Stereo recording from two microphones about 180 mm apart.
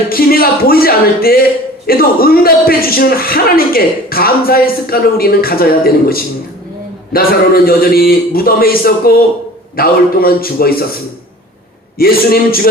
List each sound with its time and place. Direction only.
0.1 s a man's voice: 55° left (ahead or behind)
11.9 s a man's voice: 55° left (ahead or behind)